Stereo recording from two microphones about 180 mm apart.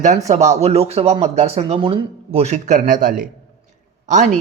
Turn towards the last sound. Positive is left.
turn(degrees=-45)  # may be behind; listen again after turning